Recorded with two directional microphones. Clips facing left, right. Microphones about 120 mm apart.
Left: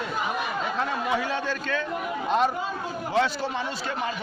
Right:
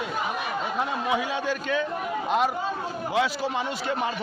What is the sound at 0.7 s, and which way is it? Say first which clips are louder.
Speech: right 1 dB; 15° right (ahead or behind).